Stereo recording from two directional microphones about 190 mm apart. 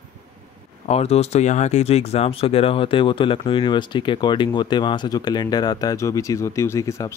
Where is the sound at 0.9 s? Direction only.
35° left (ahead or behind); by 7.1 s 15° left (ahead or behind).